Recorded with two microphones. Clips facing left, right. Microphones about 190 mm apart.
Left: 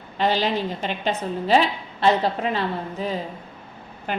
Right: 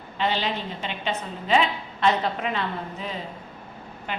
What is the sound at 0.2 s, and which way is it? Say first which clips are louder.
A woman's voice: left 5 dB; 40° left (ahead or behind).